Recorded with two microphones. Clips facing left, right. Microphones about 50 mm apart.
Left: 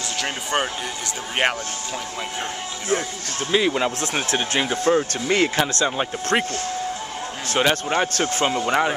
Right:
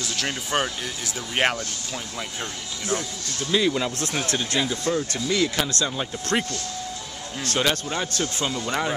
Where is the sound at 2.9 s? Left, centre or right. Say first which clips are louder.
Left 4 dB; left.